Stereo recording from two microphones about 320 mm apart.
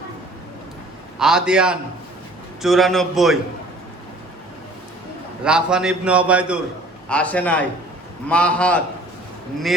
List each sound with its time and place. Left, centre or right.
1.2 s a man's voice: centre
5.4 s a man's voice: centre